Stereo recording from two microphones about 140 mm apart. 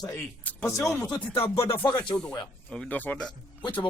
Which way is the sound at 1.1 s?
40° left (ahead or behind).